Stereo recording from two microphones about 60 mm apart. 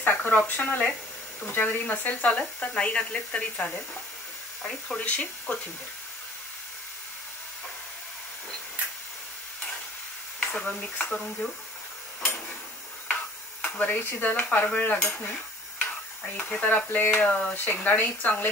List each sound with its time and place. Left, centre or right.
0.0 s speech: left
4.9 s speech: left
10.6 s speech: left
13.1 s stir: left
13.9 s speech: left
16.3 s speech: left
17.6 s speech: left